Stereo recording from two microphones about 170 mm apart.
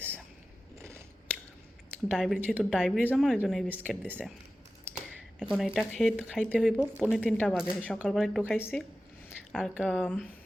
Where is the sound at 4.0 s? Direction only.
10° right (ahead or behind).